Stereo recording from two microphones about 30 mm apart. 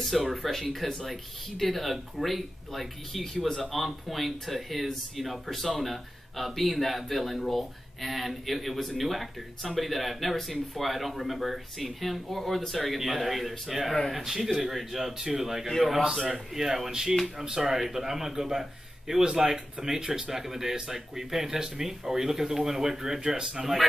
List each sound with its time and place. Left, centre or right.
0.0 s speech: centre
20.0 s speech: right
20.2 s speech: centre